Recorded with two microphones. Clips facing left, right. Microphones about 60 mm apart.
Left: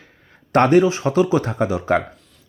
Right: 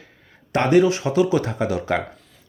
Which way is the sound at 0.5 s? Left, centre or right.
Left.